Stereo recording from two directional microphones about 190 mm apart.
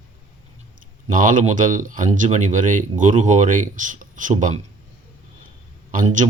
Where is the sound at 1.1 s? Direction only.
45° right (ahead or behind).